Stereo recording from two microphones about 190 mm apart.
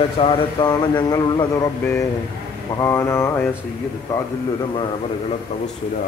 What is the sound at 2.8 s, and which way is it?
Mantra, 10° left (ahead or behind).